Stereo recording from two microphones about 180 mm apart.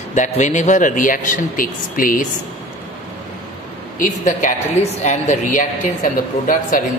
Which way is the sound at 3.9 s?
45° left (ahead or behind).